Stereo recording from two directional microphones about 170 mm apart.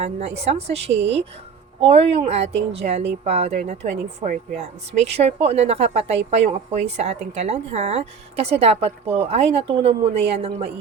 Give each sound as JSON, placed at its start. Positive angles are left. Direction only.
{"t": 0.0, "sound": "speech", "side_deg": -40}